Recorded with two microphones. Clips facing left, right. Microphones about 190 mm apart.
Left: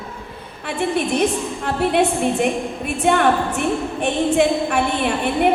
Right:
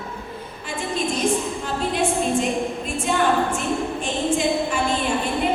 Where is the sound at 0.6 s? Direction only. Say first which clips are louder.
Left 6 dB; 65° left (ahead or behind).